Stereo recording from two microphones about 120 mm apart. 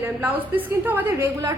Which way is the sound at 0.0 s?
15° right (ahead or behind).